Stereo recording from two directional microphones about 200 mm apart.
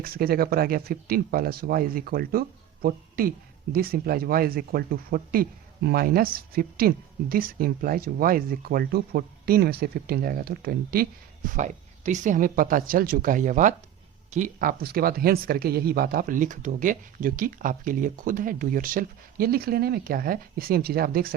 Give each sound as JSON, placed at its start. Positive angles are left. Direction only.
{"t": 0.0, "sound": "speech", "side_deg": -50}